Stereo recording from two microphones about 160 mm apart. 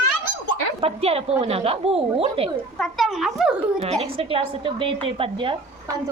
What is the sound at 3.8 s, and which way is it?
A woman's voice, 40° right (ahead or behind).